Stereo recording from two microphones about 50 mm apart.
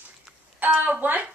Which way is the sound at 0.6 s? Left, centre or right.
Right.